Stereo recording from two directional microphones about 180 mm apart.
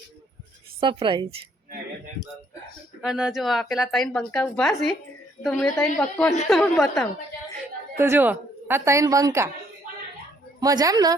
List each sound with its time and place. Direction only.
0.8 s speech: 30° right (ahead or behind)
3.0 s a woman's voice: 5° right (ahead or behind)
7.9 s a woman's voice: 15° right (ahead or behind)
10.6 s speech: 20° right (ahead or behind)